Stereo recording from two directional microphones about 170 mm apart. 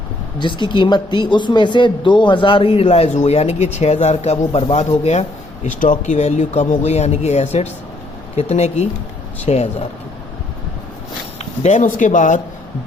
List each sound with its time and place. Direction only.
0.3 s speech: 25° left (ahead or behind)
11.6 s speech: 45° left (ahead or behind)